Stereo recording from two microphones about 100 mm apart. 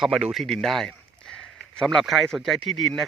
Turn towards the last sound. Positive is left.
turn(degrees=0)  # may be behind; listen again after turning